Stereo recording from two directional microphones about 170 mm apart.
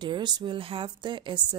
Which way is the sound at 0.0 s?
25° right (ahead or behind).